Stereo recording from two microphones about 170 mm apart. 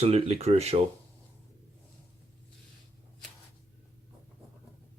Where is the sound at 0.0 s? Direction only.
35° right (ahead or behind).